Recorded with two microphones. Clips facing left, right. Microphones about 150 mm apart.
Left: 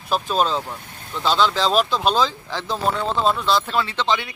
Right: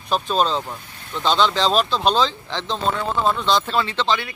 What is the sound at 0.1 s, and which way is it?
Speech, 10° left (ahead or behind).